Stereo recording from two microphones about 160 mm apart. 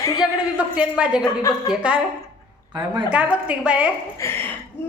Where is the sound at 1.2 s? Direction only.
25° left (ahead or behind).